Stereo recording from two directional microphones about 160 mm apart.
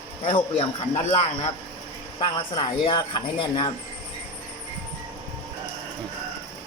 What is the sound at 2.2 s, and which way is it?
Speech, 35° left (ahead or behind).